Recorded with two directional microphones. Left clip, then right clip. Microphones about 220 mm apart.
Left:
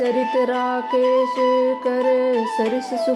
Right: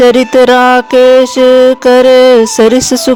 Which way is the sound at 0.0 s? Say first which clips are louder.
Right 14 dB; 40° right (ahead or behind).